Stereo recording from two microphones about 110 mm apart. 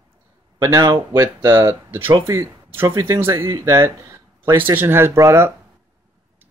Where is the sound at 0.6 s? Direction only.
30° right (ahead or behind).